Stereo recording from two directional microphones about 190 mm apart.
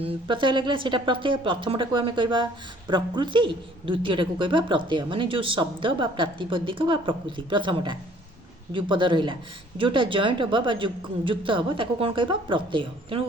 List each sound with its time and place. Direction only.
0.0 s speech: 25° right (ahead or behind)